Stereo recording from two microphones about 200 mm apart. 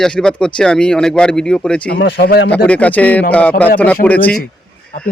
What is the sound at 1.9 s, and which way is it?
Speech, 55° left (ahead or behind).